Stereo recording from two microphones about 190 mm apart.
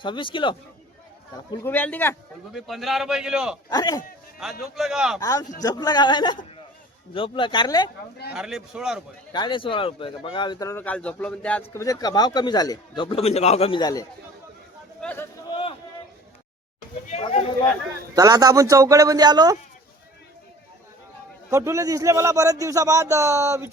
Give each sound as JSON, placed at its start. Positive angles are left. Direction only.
{"t": 0.0, "sound": "a man's voice", "side_deg": 25}
{"t": 1.6, "sound": "a man's voice", "side_deg": 10}
{"t": 3.7, "sound": "a man's voice", "side_deg": 20}
{"t": 4.6, "sound": "a man's voice", "side_deg": 0}
{"t": 5.2, "sound": "a man's voice", "side_deg": 20}
{"t": 8.3, "sound": "a man's voice", "side_deg": -5}
{"t": 9.3, "sound": "a man's voice", "side_deg": 25}
{"t": 11.7, "sound": "a man's voice", "side_deg": 15}
{"t": 15.0, "sound": "a sound", "side_deg": 10}
{"t": 15.4, "sound": "a sound", "side_deg": 25}
{"t": 17.1, "sound": "speech", "side_deg": 35}
{"t": 18.1, "sound": "a man's voice", "side_deg": -20}
{"t": 21.5, "sound": "speech", "side_deg": -15}